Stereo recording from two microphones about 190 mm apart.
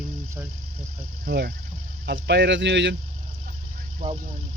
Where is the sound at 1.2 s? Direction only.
55° right (ahead or behind).